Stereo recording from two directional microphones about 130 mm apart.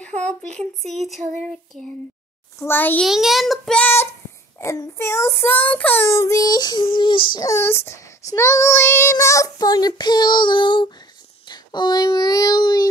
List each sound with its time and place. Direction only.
0.2 s a sound: 10° left (ahead or behind)
0.8 s child singing: centre (ahead or behind)
2.6 s a child's voice: 15° left (ahead or behind)
3.1 s child singing: centre (ahead or behind)
4.6 s child singing: 25° left (ahead or behind); by 7.4 s 40° left (ahead or behind)
7.4 s child singing: 20° left (ahead or behind); by 10.9 s 35° left (ahead or behind)
11.4 s speech: 35° left (ahead or behind)